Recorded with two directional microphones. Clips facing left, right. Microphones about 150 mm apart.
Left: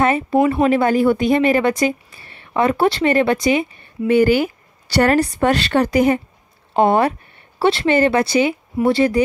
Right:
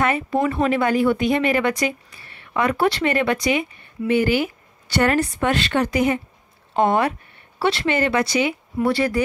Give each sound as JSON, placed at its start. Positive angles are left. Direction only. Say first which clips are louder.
{"t": 0.0, "sound": "speech", "louder": "left 5 dB", "side_deg": 30}
{"t": 4.1, "sound": "speech", "louder": "left 5 dB", "side_deg": 40}